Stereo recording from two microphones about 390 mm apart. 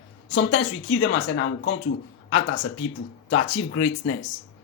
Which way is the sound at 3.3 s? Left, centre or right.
Left.